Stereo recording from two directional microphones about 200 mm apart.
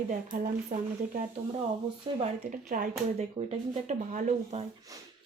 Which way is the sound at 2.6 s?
45° right (ahead or behind).